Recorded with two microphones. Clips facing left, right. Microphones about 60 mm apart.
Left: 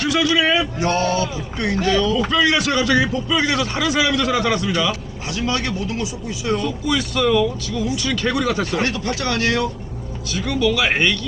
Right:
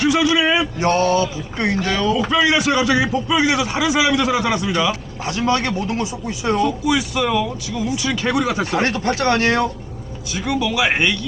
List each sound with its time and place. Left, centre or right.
0.0 s a man's voice: centre
0.8 s a man's voice: right
6.6 s a man's voice: centre
8.8 s speech: right
10.3 s a man's voice: centre